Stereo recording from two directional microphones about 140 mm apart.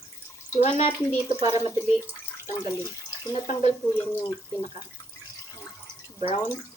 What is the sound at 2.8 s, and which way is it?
Bathtub, 25° left (ahead or behind).